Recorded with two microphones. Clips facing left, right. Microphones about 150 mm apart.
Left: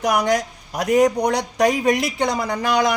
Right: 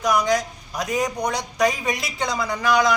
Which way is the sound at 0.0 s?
65° left (ahead or behind).